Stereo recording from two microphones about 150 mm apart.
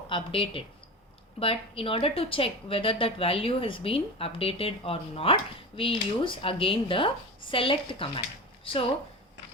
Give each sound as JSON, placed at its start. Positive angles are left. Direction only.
{"t": 0.1, "sound": "a woman's voice", "side_deg": 35}